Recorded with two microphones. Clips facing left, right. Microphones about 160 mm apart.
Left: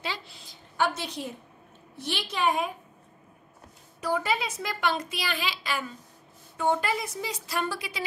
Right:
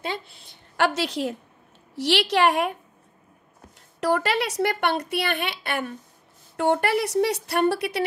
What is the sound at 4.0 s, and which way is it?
A woman's voice, 85° right.